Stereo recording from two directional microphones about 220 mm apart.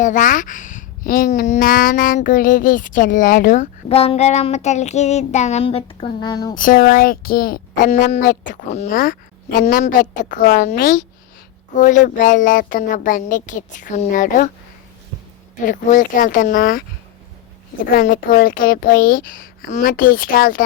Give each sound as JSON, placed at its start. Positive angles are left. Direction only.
{"t": 0.0, "sound": "speech", "side_deg": 35}
{"t": 6.5, "sound": "speech", "side_deg": 40}
{"t": 7.9, "sound": "speech", "side_deg": 30}
{"t": 15.6, "sound": "speech", "side_deg": 35}
{"t": 18.3, "sound": "speech", "side_deg": 40}